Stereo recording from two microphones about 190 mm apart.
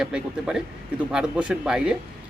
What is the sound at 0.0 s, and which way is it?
A man's voice, 5° right (ahead or behind).